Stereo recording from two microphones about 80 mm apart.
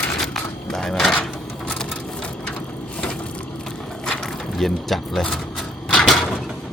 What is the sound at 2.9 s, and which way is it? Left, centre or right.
Mechanisms, centre.